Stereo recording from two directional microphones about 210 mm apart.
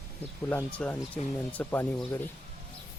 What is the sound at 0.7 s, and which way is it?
Speech, 5° left (ahead or behind).